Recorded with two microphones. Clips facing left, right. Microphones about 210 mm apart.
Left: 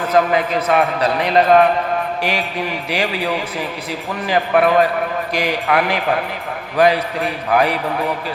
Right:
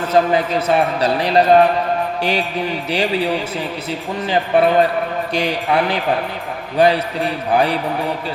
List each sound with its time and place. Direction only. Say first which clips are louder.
0.1 s a man's voice: right 1 dB; 30° right (ahead or behind)
4.3 s a man's voice: even; 30° right (ahead or behind)